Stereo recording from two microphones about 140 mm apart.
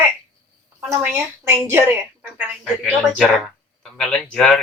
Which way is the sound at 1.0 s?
20° right (ahead or behind).